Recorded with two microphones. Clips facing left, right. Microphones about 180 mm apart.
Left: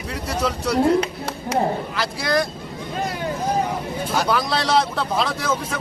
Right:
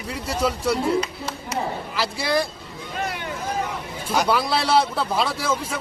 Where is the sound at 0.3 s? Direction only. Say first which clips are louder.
Right 1 dB; 5° right (ahead or behind).